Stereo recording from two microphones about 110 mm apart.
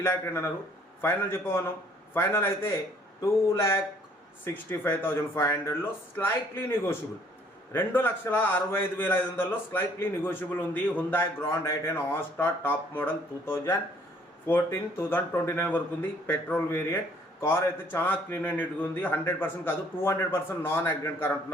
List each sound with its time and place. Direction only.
0.0 s a man's voice: 25° left (ahead or behind)